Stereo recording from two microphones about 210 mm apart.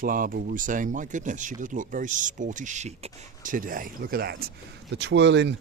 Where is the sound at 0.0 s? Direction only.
40° right (ahead or behind).